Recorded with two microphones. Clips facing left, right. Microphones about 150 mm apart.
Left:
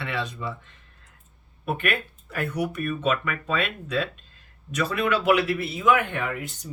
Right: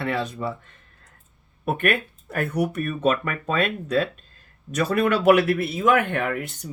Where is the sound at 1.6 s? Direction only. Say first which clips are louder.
Right 4 dB; 50° right (ahead or behind).